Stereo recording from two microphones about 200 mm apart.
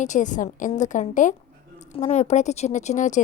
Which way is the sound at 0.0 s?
40° left (ahead or behind).